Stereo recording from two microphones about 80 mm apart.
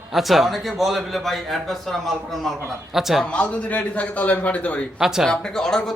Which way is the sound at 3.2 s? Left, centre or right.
Centre.